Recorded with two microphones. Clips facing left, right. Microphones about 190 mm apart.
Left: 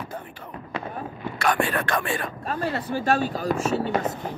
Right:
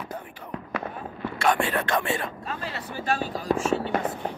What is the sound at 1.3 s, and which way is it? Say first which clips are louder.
Speech: even; 25° right (ahead or behind).